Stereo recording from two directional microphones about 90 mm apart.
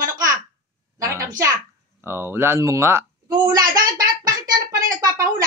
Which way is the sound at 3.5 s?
45° right (ahead or behind).